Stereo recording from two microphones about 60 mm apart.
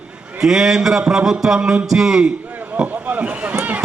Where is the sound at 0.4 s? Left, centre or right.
Centre.